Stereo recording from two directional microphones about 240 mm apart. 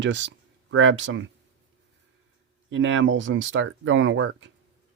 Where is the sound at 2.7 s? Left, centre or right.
Right.